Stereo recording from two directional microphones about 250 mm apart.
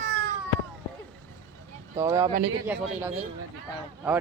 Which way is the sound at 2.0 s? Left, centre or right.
Centre.